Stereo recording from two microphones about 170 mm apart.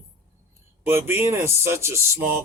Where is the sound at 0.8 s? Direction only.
15° right (ahead or behind).